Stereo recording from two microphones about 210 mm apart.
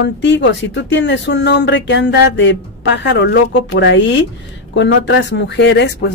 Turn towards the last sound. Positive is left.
turn(degrees=55)  # may be behind; listen again after turning